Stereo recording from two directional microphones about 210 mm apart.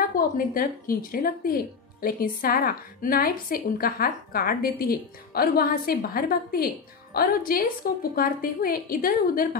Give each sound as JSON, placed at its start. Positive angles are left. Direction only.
{"t": 0.1, "sound": "speech", "side_deg": 40}